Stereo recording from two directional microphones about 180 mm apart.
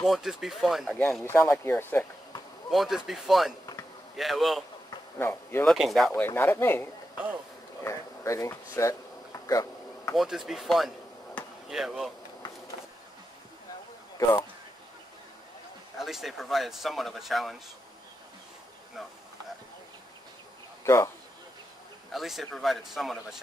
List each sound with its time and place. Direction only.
0.0 s speech: centre (ahead or behind)
1.2 s speech: 15° left (ahead or behind)
2.7 s speech: centre (ahead or behind)
5.2 s speech: 10° left (ahead or behind)
5.7 s speech: centre (ahead or behind)
6.2 s speech: 15° left (ahead or behind)
7.8 s a sound: 15° left (ahead or behind)
10.1 s speech: centre (ahead or behind)
11.3 s basketball bounce: centre (ahead or behind)
16.0 s speech: centre (ahead or behind)
19.0 s speech: centre (ahead or behind)
20.8 s speech: 15° left (ahead or behind)
22.1 s speech: centre (ahead or behind)